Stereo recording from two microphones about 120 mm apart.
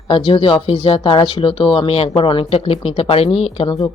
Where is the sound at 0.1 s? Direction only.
45° left (ahead or behind).